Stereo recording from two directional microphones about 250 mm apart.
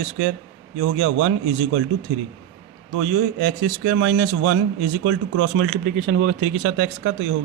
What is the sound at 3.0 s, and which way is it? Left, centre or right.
A man's voice, right.